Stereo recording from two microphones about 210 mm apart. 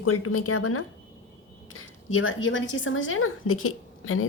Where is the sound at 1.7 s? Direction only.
75° left (ahead or behind).